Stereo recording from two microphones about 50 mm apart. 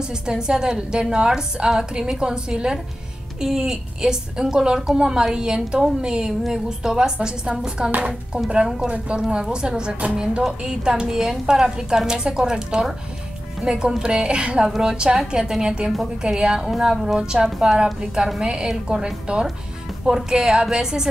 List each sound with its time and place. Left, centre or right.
0.3 s a woman's voice: centre
9.3 s a woman's voice: centre